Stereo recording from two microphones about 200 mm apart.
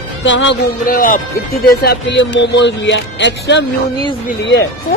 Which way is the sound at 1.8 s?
60° left (ahead or behind).